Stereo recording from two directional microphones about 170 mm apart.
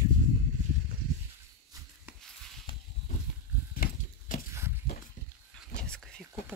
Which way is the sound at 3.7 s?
50° left (ahead or behind).